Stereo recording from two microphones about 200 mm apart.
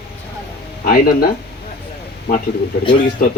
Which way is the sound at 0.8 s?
50° left (ahead or behind).